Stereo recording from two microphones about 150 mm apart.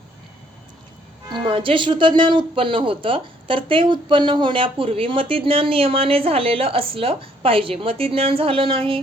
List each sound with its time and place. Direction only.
1.3 s speech: 35° right (ahead or behind)